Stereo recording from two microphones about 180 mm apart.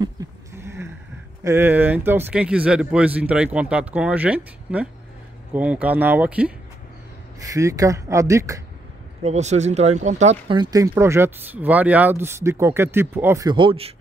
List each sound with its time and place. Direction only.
0.0 s a sound: 20° right (ahead or behind)
1.4 s speech: 15° right (ahead or behind)
7.3 s speech: 20° right (ahead or behind)
9.2 s speech: 40° right (ahead or behind)
10.5 s speech: 20° right (ahead or behind)
13.5 s a man's voice: 30° right (ahead or behind)